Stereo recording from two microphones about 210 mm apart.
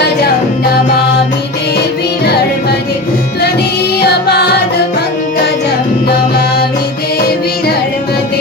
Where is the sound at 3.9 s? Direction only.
50° left (ahead or behind).